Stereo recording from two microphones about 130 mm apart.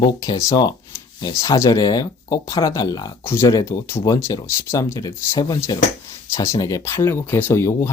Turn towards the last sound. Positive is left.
turn(degrees=20)  # may be behind; listen again after turning